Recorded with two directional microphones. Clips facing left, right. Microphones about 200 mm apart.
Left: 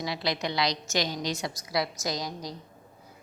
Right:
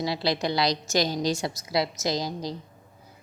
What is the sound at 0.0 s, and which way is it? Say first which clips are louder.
A woman's voice: right 4 dB; 30° right (ahead or behind).